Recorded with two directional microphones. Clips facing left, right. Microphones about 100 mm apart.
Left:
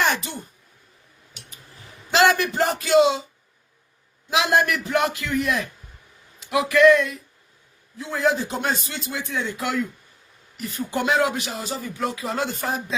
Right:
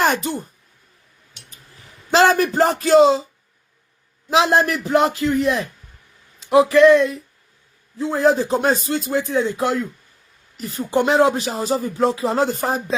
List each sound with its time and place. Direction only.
0.0 s speech: 40° right (ahead or behind)
2.0 s speech: 35° right (ahead or behind)
4.3 s a man's voice: 35° right (ahead or behind)